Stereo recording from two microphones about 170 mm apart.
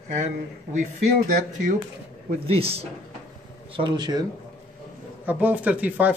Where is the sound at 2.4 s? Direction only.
35° right (ahead or behind).